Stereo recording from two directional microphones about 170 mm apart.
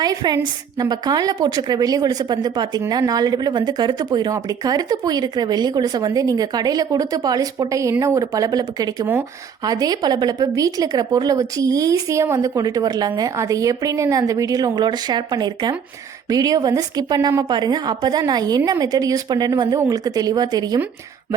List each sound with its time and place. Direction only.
0.0 s a woman's voice: 25° right (ahead or behind)